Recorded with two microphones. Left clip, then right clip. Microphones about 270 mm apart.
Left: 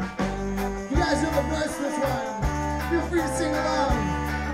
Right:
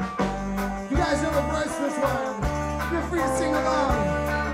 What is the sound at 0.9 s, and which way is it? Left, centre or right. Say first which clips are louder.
Music: even; left.